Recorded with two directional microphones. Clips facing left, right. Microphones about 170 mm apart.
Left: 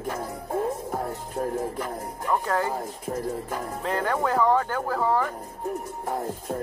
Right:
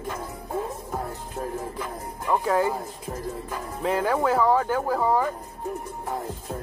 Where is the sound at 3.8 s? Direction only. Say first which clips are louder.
Right 3 dB; 5° right (ahead or behind).